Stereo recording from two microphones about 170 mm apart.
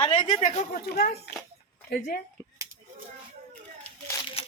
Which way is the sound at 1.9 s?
65° left (ahead or behind).